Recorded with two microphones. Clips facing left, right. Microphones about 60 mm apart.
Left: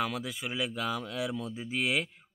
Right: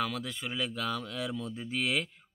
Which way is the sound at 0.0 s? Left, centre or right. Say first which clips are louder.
Left 1 dB; centre.